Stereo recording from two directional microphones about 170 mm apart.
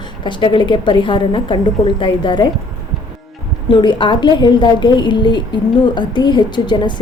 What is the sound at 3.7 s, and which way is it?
A woman's voice, 30° left (ahead or behind).